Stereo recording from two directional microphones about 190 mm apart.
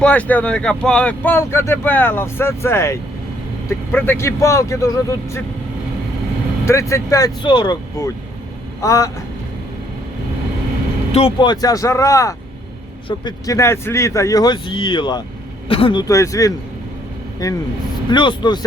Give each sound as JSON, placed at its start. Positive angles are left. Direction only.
{"t": 0.0, "sound": "speech", "side_deg": 10}
{"t": 6.7, "sound": "speech", "side_deg": 15}
{"t": 11.1, "sound": "speech", "side_deg": 25}